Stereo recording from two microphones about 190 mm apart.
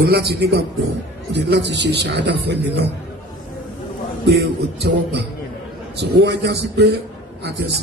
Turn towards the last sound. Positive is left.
turn(degrees=-65)  # may be behind; listen again after turning